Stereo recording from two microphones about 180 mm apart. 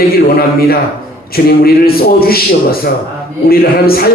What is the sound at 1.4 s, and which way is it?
Speech, 60° left (ahead or behind).